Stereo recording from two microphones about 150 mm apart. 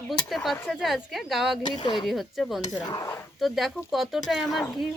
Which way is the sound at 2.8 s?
20° left (ahead or behind).